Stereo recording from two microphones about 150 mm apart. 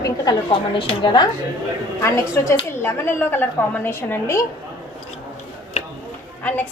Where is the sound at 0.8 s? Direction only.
35° left (ahead or behind).